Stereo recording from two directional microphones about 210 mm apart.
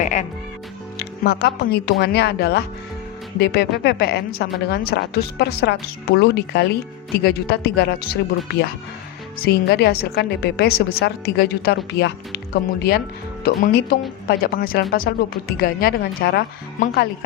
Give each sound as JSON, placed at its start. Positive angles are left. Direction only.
{"t": 0.0, "sound": "speech", "side_deg": 35}
{"t": 0.9, "sound": "a woman's voice", "side_deg": 50}
{"t": 9.4, "sound": "a woman's voice", "side_deg": 50}
{"t": 13.4, "sound": "a woman's voice", "side_deg": 45}